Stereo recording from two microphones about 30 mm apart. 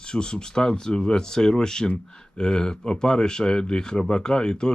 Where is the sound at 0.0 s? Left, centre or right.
Left.